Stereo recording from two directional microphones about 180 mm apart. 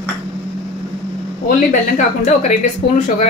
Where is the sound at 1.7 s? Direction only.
40° left (ahead or behind).